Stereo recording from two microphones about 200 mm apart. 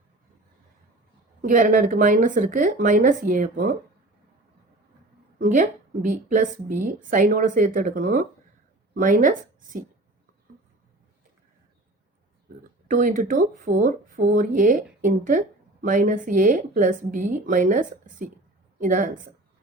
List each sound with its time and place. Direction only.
1.4 s a woman's voice: 40° right (ahead or behind)
5.4 s a woman's voice: 40° right (ahead or behind)
12.9 s a woman's voice: 45° right (ahead or behind)